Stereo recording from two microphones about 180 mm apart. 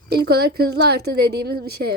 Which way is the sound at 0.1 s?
60° right (ahead or behind).